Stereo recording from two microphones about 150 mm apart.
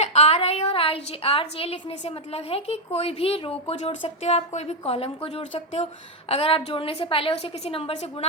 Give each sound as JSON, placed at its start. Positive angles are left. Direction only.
{"t": 0.0, "sound": "a woman's voice", "side_deg": 45}